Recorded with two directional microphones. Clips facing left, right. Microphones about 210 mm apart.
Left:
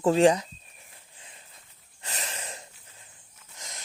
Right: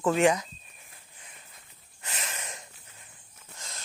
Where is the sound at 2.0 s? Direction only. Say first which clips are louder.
Left 1 dB; 35° left (ahead or behind).